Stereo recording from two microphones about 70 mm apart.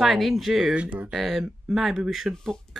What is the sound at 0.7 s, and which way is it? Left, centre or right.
Speech, centre.